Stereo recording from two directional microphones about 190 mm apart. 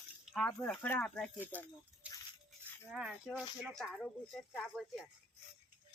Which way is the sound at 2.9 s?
5° right (ahead or behind).